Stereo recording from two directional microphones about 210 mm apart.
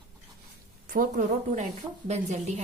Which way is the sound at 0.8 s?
40° right (ahead or behind).